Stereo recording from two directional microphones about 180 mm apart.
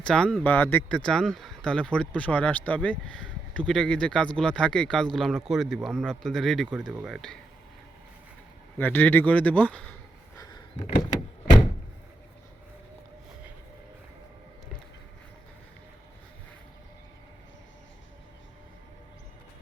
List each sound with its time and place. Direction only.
0.0 s speech: 5° left (ahead or behind)
8.8 s speech: 10° left (ahead or behind)
10.3 s a sound: 20° left (ahead or behind)